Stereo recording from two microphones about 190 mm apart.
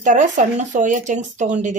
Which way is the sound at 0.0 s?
40° right (ahead or behind).